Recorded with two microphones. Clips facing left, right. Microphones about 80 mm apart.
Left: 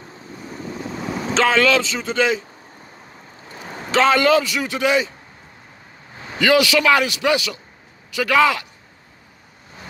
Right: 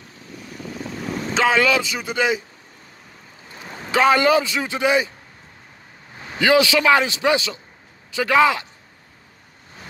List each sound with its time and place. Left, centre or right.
1.3 s speech: centre
3.5 s a sound: centre
3.9 s a man's voice: centre
6.3 s a man's voice: right